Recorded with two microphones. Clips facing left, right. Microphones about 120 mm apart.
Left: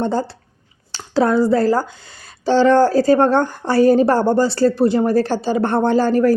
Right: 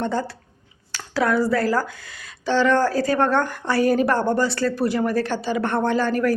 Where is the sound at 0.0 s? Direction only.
30° left (ahead or behind).